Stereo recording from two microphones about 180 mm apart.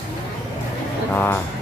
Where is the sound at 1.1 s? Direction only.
10° left (ahead or behind).